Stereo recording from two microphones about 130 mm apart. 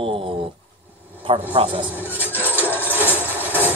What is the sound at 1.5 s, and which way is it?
Speech, 40° right (ahead or behind).